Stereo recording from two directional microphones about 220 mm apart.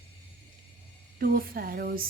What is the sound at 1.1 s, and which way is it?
Speech, 40° right (ahead or behind).